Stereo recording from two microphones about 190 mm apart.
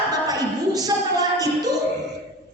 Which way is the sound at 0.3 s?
20° right (ahead or behind).